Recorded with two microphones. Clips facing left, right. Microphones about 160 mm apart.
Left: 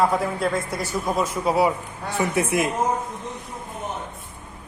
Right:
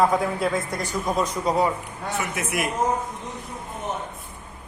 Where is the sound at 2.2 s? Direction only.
30° left (ahead or behind).